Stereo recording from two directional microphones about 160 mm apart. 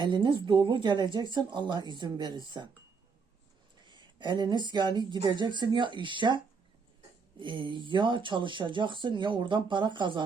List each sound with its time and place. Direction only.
0.0 s speech: 30° right (ahead or behind)
3.8 s speech: 30° right (ahead or behind)